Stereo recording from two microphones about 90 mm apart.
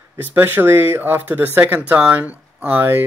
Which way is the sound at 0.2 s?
25° right (ahead or behind).